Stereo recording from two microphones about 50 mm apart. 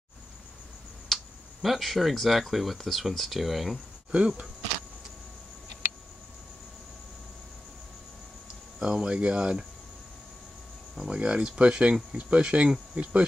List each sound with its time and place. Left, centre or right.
1.0 s speech: centre
4.1 s speech: centre
8.7 s speech: centre
11.1 s speech: right
12.9 s cricket: right